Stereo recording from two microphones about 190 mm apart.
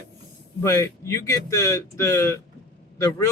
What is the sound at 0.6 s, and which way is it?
Speech, 15° left (ahead or behind).